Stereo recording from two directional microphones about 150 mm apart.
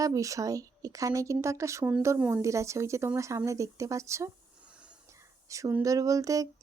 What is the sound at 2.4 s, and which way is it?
Speech, 20° right (ahead or behind).